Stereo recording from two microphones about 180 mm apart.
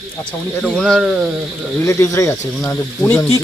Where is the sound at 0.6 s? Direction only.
5° left (ahead or behind).